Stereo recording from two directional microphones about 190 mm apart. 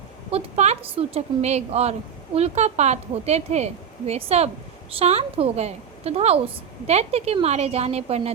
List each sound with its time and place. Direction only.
0.3 s a woman's voice: 35° right (ahead or behind)